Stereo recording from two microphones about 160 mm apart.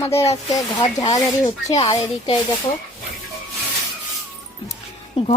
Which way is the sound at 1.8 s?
35° left (ahead or behind).